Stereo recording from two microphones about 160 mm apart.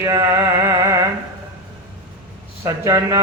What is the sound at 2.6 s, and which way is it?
Music, 20° right (ahead or behind).